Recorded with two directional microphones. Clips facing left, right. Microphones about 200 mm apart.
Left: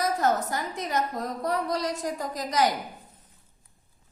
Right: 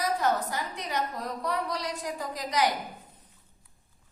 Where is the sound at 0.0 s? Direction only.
45° left (ahead or behind).